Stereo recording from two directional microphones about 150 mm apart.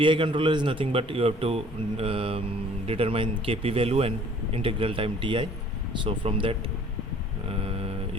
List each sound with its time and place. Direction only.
0.0 s a man's voice: 35° right (ahead or behind)
7.4 s mantra: 40° right (ahead or behind)